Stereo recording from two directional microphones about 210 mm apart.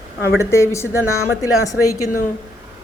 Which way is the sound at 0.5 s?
15° left (ahead or behind).